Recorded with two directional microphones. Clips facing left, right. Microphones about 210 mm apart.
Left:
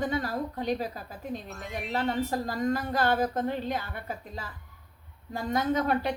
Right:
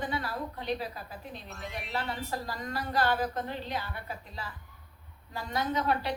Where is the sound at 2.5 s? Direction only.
50° left (ahead or behind).